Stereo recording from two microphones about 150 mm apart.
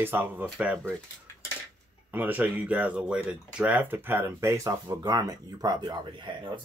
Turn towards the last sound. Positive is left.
turn(degrees=-30)  # may be behind; listen again after turning